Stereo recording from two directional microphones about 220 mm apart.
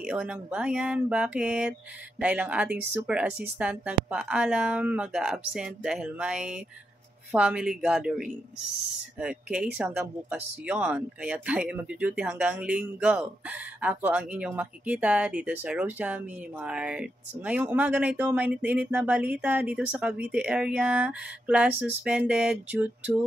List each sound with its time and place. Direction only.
0.0 s speech: 5° right (ahead or behind)